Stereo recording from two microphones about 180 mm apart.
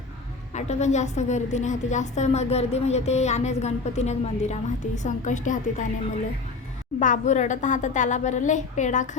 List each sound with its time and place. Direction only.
0.5 s a woman's voice: 40° left (ahead or behind)
7.0 s a woman's voice: 45° left (ahead or behind)